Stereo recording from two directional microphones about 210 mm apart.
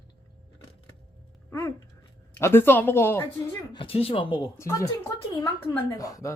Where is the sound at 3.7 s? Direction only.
25° left (ahead or behind).